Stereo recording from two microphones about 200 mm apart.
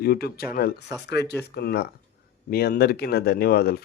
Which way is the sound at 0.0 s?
50° left (ahead or behind).